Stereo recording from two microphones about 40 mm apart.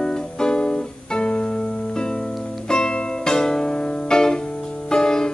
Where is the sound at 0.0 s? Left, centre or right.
Centre.